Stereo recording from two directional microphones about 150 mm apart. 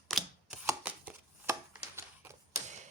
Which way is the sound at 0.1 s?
Centre (ahead or behind).